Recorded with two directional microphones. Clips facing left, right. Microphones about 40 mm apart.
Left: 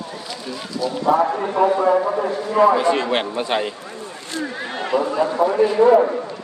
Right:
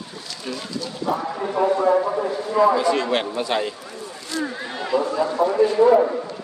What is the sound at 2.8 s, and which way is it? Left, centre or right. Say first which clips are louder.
Speech: left 2 dB; left.